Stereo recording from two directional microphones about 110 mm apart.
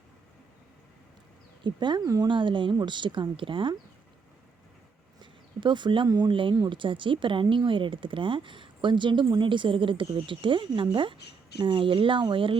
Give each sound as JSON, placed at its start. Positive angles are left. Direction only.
{"t": 1.6, "sound": "speech", "side_deg": -45}
{"t": 5.2, "sound": "a sound", "side_deg": -45}
{"t": 6.1, "sound": "speech", "side_deg": -40}